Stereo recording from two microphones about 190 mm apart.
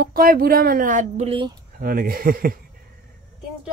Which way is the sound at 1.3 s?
25° right (ahead or behind).